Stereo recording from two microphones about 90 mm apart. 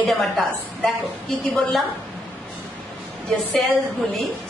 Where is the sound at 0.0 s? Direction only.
Centre (ahead or behind).